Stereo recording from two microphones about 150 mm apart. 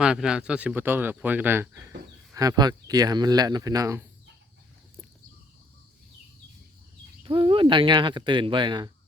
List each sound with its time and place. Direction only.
0.0 s speech: 5° right (ahead or behind)
2.3 s speech: 25° right (ahead or behind)
7.2 s speech: 35° right (ahead or behind)